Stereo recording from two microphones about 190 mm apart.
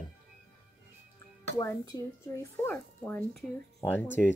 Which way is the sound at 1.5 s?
15° left (ahead or behind).